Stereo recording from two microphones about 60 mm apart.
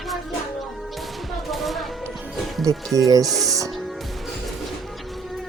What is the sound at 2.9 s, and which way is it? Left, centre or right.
Speech, right.